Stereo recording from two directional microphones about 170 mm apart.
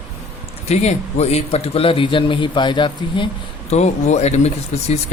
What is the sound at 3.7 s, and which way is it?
Speech, 40° left (ahead or behind).